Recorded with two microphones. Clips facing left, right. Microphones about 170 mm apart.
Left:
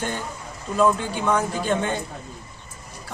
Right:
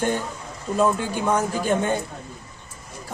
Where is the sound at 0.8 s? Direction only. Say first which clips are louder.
Left 1 dB; 15° right (ahead or behind).